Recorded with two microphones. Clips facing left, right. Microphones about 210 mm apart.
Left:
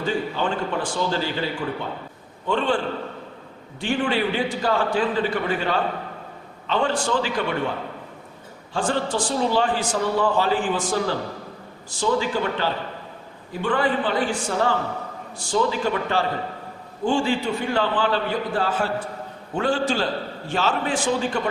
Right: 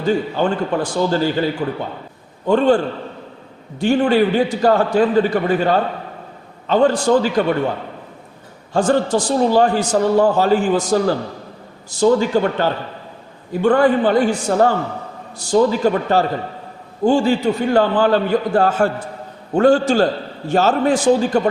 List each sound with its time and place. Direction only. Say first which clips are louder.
0.0 s a man's voice: right 7 dB; 40° right (ahead or behind)
2.5 s a man's voice: right 8 dB; 40° right (ahead or behind)
8.7 s a man's voice: right 8 dB; 40° right (ahead or behind)